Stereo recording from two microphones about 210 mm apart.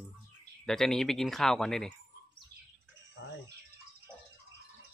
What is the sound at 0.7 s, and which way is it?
Speech, centre (ahead or behind).